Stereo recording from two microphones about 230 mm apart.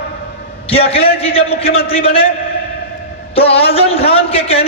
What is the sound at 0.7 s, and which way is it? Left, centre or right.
A man's voice, left.